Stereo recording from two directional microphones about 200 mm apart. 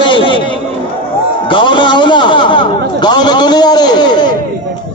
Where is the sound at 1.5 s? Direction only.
25° left (ahead or behind).